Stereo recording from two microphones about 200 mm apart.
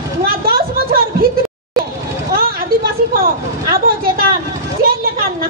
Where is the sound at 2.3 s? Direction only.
50° right (ahead or behind).